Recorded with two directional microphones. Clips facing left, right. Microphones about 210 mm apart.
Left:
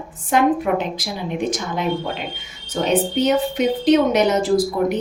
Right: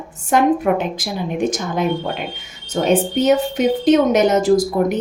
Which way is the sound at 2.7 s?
45° right (ahead or behind).